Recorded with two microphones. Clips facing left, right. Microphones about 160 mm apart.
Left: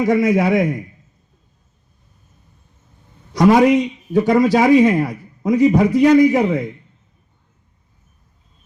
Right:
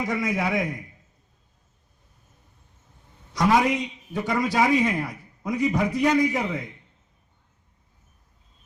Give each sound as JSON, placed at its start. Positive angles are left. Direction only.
{"t": 0.0, "sound": "a man's voice", "side_deg": 90}
{"t": 3.3, "sound": "a man's voice", "side_deg": 75}